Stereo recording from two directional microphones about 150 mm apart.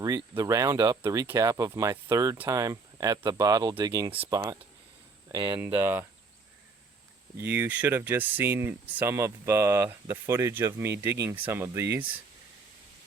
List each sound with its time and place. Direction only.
0.3 s speech: 20° right (ahead or behind)
5.5 s speech: 15° right (ahead or behind)
7.4 s speech: 15° right (ahead or behind)